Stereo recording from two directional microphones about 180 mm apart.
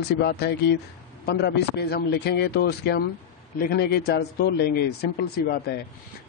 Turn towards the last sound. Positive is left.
turn(degrees=60)  # may be behind; listen again after turning